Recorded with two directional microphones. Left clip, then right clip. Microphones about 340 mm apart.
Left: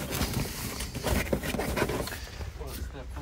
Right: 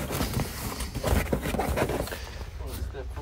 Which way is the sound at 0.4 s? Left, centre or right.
Centre.